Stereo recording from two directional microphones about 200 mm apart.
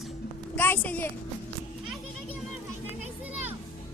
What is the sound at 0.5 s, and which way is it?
Speech, 10° left (ahead or behind).